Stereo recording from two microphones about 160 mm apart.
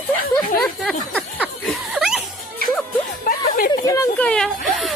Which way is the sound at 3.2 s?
60° left (ahead or behind).